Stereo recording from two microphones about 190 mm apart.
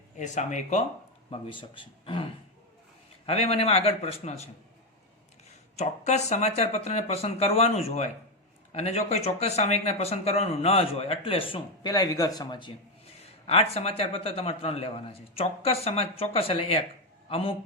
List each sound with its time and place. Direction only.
0.2 s speech: 40° left (ahead or behind)
1.3 s a man's voice: 25° left (ahead or behind)
5.7 s a man's voice: 35° left (ahead or behind)